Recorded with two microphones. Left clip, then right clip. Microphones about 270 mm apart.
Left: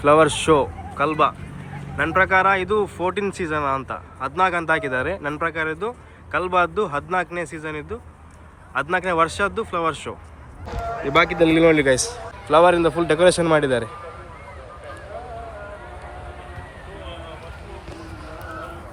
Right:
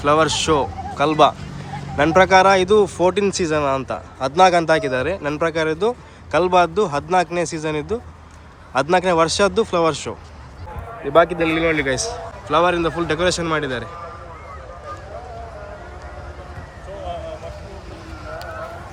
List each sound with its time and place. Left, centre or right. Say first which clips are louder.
0.0 s a man's voice: left 1 dB; centre
11.4 s speech: left 3 dB; centre
11.9 s a man's voice: left 2 dB; centre